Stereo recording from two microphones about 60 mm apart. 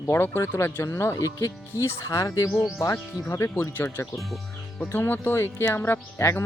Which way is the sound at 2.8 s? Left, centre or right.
Left.